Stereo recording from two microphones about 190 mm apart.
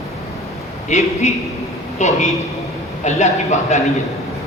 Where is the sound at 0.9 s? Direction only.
40° left (ahead or behind).